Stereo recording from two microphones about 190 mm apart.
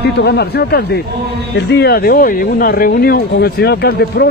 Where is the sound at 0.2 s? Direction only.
60° left (ahead or behind).